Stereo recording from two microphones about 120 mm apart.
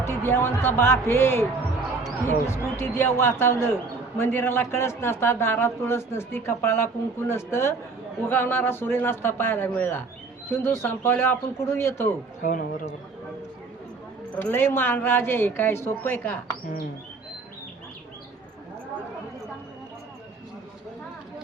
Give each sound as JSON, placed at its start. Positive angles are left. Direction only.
{"t": 0.0, "sound": "a man's voice", "side_deg": 20}
{"t": 12.4, "sound": "speech", "side_deg": 90}
{"t": 14.3, "sound": "a woman's voice", "side_deg": 15}